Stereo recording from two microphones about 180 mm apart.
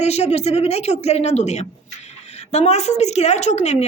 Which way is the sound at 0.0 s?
35° left (ahead or behind).